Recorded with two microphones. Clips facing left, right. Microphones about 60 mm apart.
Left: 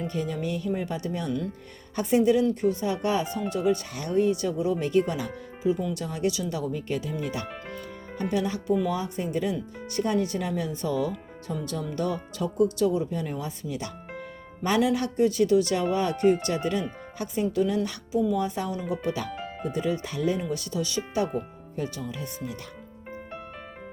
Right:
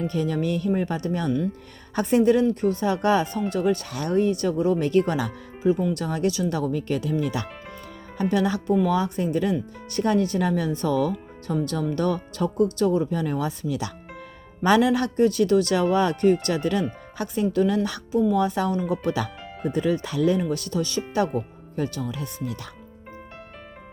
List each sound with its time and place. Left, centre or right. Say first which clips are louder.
0.0 s speech: right 5 dB; right
5.6 s speech: right 4 dB; right
5.9 s speech: right 3 dB; right
14.6 s speech: right 5 dB; right
18.1 s speech: right 3 dB; right
18.3 s speech: right 6 dB; right
18.8 s speech: right 4 dB; right